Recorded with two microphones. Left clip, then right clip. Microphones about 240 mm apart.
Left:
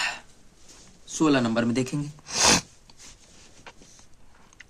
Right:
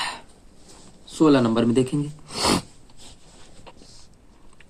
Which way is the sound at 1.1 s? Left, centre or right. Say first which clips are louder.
Right 5 dB; centre.